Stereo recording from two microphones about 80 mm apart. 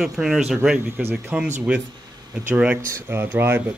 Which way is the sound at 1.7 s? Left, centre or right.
Centre.